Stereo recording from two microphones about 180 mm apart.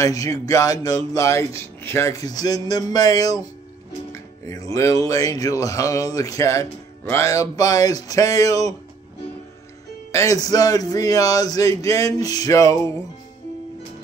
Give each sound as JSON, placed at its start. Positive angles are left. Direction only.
{"t": 0.0, "sound": "speech", "side_deg": 20}
{"t": 10.1, "sound": "speech", "side_deg": 20}